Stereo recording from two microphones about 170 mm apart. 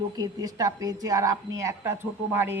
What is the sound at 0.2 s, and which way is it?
A woman's voice, 20° right (ahead or behind).